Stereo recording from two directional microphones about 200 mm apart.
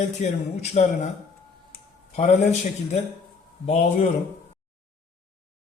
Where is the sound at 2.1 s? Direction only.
35° left (ahead or behind).